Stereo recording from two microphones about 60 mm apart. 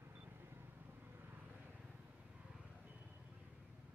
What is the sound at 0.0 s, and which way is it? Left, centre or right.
Vehicle, right.